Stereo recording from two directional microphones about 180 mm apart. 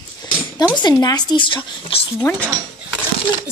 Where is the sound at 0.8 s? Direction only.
25° left (ahead or behind).